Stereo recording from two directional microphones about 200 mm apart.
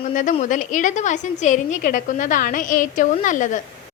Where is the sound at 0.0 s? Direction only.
40° left (ahead or behind).